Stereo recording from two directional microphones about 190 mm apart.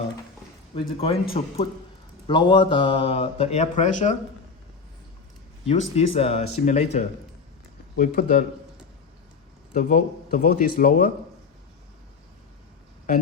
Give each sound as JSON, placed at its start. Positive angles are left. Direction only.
{"t": 0.7, "sound": "speech", "side_deg": 30}
{"t": 6.0, "sound": "speech", "side_deg": 30}
{"t": 9.7, "sound": "speech", "side_deg": 45}